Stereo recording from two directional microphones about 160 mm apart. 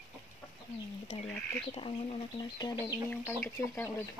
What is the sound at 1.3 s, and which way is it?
Speech, 10° left (ahead or behind).